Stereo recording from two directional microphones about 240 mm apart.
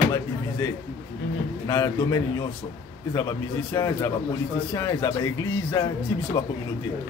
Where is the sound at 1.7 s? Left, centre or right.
Centre.